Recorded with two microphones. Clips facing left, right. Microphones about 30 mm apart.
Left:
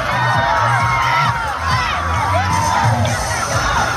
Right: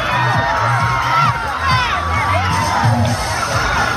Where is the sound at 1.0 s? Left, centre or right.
Centre.